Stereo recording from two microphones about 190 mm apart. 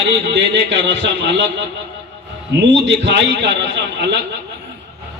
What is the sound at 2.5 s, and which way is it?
A man's voice, 70° right (ahead or behind).